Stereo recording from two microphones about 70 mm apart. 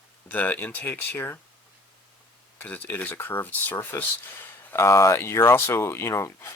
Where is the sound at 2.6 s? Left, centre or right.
Left.